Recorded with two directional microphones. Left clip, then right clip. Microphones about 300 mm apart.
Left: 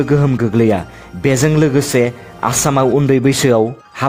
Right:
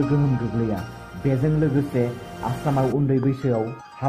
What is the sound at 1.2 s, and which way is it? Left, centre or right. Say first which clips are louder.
A man's voice: left 10 dB; left.